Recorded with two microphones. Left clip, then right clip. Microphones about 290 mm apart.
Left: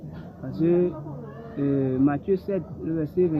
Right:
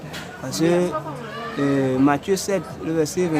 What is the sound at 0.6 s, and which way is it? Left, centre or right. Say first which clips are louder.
Speech: right 3 dB; centre.